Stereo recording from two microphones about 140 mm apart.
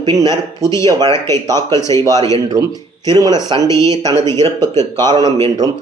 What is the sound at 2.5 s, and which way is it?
Speech, 30° right (ahead or behind).